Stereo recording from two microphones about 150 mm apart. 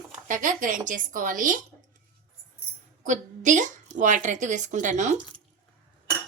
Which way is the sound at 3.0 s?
55° right (ahead or behind).